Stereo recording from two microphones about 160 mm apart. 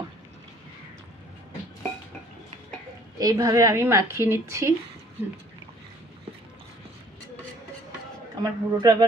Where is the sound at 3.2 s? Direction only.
25° right (ahead or behind).